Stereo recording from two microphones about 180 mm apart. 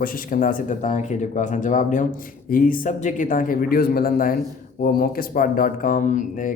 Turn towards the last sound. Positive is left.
turn(degrees=45)  # may be behind; listen again after turning